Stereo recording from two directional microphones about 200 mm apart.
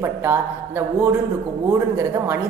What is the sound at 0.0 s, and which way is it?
A woman's voice, 10° right (ahead or behind).